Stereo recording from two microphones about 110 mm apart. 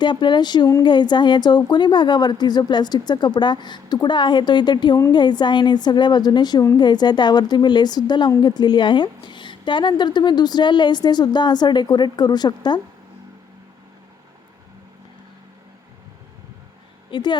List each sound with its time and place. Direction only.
0.0 s a woman's voice: 45° left (ahead or behind)
17.1 s speech: 45° left (ahead or behind)